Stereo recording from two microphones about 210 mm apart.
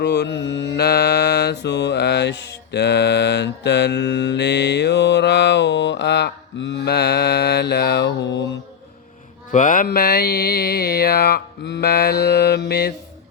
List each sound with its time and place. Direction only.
0.0 s mantra: 55° left (ahead or behind)
9.5 s mantra: 40° left (ahead or behind)